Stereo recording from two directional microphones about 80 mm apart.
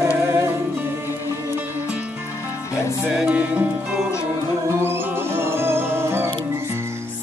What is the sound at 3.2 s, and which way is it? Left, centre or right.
Music, centre.